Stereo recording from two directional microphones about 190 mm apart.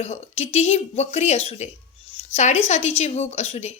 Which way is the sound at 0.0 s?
35° left (ahead or behind).